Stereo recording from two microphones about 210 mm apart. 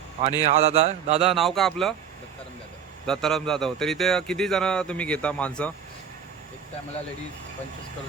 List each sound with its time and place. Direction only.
0.4 s mantra: 30° right (ahead or behind)
1.2 s a man's voice: centre (ahead or behind)
3.1 s a man's voice: centre (ahead or behind)